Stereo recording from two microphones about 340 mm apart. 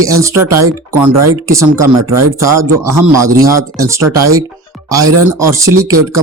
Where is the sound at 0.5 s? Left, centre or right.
Right.